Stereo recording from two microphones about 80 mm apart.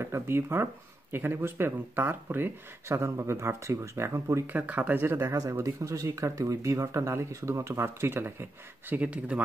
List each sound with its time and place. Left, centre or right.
0.0 s speech: right
4.5 s speech: right
5.0 s speech: right; by 9.4 s centre